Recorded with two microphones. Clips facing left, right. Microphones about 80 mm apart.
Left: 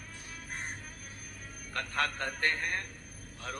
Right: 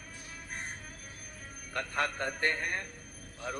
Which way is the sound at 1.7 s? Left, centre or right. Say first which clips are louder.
Even; right.